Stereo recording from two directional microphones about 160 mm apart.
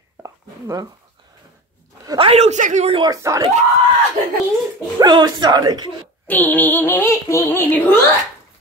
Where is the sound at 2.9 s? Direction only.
25° right (ahead or behind).